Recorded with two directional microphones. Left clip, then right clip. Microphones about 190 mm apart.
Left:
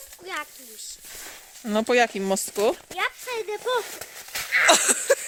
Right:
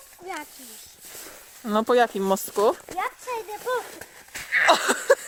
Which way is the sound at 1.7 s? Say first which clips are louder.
Right 1 dB; 15° left (ahead or behind).